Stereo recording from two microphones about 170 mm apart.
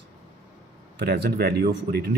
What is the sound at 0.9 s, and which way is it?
Speech, 70° right (ahead or behind).